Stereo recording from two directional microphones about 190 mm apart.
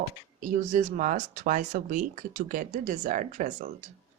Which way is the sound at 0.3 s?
45° right (ahead or behind).